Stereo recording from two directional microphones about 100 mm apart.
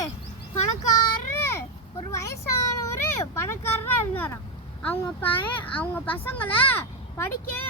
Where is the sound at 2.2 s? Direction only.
30° left (ahead or behind).